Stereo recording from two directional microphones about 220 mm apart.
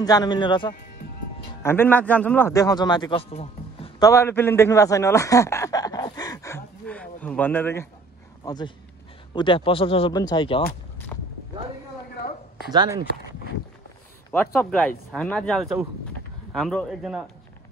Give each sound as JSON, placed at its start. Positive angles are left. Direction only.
{"t": 0.0, "sound": "speech", "side_deg": 20}
{"t": 1.6, "sound": "speech", "side_deg": 10}
{"t": 4.0, "sound": "a sound", "side_deg": 15}
{"t": 8.5, "sound": "speech", "side_deg": 20}
{"t": 12.7, "sound": "speech", "side_deg": -15}
{"t": 14.3, "sound": "speech", "side_deg": 10}